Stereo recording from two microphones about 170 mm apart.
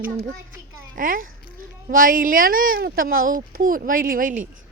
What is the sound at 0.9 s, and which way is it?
Speech, 55° right (ahead or behind).